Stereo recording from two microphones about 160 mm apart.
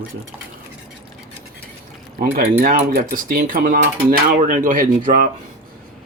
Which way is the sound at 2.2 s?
65° right (ahead or behind).